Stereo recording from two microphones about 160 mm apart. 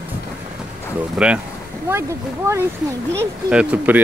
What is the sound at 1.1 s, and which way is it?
Speech, 5° right (ahead or behind).